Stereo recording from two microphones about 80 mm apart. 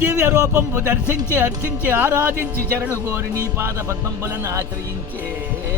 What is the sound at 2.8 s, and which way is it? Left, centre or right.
Speech, right.